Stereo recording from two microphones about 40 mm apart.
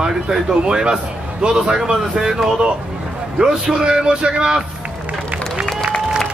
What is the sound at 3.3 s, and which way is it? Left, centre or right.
Speech, centre.